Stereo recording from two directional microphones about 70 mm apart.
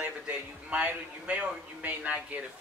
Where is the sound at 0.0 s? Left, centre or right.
Right.